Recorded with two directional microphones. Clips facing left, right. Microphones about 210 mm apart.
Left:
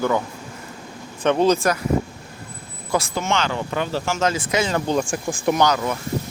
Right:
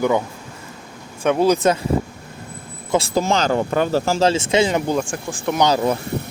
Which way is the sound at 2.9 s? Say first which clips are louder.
Right 4 dB; 30° right (ahead or behind).